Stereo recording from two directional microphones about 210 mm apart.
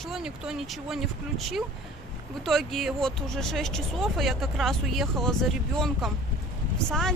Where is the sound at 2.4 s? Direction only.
Centre (ahead or behind).